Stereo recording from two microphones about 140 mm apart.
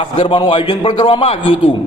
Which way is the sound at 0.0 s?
35° left (ahead or behind).